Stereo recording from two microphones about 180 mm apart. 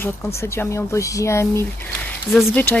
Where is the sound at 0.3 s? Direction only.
15° left (ahead or behind).